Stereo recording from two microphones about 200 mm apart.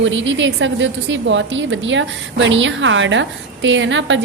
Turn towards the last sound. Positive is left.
turn(degrees=-65)  # may be behind; listen again after turning